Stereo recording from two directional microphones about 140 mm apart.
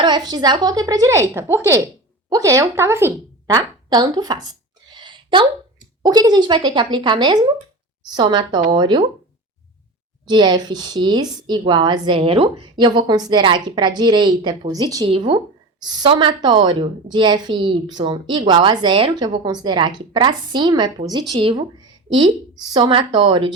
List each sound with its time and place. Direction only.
0.0 s a woman's voice: 30° right (ahead or behind)
4.9 s a sound: 35° right (ahead or behind)
6.0 s a woman's voice: 30° right (ahead or behind)
10.2 s a woman's voice: 30° right (ahead or behind)
15.0 s a woman's voice: 40° right (ahead or behind)